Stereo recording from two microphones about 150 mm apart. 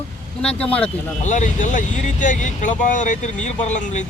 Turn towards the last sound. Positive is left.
turn(degrees=55)  # may be behind; listen again after turning